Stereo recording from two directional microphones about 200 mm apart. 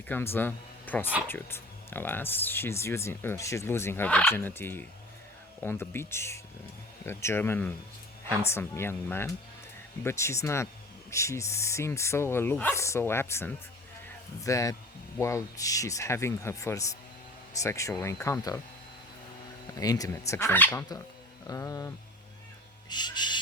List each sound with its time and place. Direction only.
0.1 s speech: 10° left (ahead or behind)
19.7 s speech: 20° left (ahead or behind)
22.9 s owl: 20° left (ahead or behind)